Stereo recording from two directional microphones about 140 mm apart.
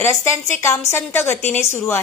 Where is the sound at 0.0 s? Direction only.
20° left (ahead or behind).